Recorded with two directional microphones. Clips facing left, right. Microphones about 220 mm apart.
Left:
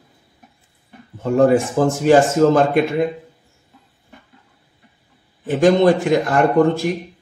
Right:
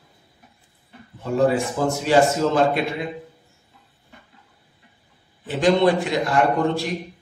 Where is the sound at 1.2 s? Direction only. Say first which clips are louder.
Left 5 dB; 50° left (ahead or behind).